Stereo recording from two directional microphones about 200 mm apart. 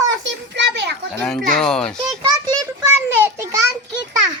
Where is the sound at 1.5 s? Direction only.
5° left (ahead or behind).